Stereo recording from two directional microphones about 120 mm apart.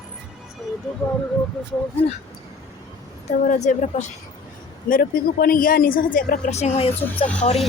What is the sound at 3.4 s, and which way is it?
Speech, 75° left (ahead or behind).